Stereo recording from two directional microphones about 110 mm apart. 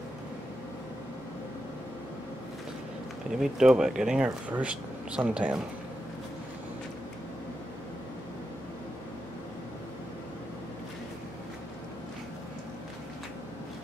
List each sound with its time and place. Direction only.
3.3 s speech: 5° right (ahead or behind)